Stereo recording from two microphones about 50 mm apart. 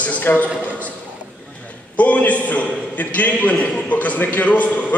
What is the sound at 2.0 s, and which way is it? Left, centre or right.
A man's voice, left.